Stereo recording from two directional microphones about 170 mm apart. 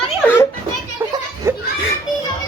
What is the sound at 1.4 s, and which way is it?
Children playing, 15° right (ahead or behind).